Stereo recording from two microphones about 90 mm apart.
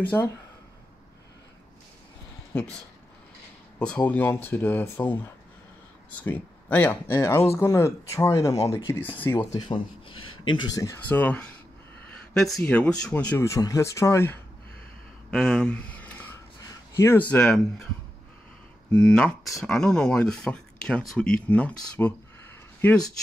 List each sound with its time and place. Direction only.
0.1 s speech: 25° left (ahead or behind)
3.8 s speech: 15° left (ahead or behind); by 9.4 s 40° left (ahead or behind)
9.6 s speech: 65° left (ahead or behind)
10.7 s speech: 40° left (ahead or behind)
11.1 s speech: 20° left (ahead or behind)
12.4 s speech: 5° left (ahead or behind)
13.4 s speech: 35° left (ahead or behind)
15.3 s a sound: 5° left (ahead or behind)
16.9 s speech: 30° left (ahead or behind)
17.2 s speech: 15° left (ahead or behind)
18.9 s speech: 10° left (ahead or behind)